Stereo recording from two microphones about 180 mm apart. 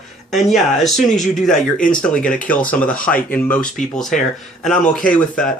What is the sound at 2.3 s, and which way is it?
Speech, 10° left (ahead or behind).